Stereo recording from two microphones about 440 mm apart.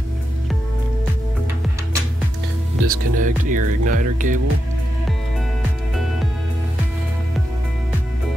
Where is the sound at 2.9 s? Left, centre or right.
Centre.